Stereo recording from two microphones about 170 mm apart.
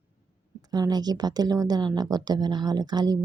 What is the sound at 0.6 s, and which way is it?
Speech, 25° right (ahead or behind).